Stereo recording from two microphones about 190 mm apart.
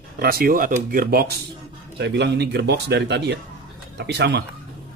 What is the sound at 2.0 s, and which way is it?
Speech, 65° right (ahead or behind).